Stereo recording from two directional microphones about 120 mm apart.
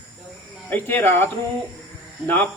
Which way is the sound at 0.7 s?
15° left (ahead or behind).